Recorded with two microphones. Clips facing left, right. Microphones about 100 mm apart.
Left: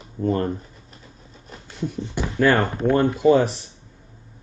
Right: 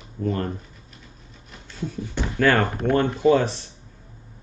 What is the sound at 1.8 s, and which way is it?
Speech, 15° left (ahead or behind).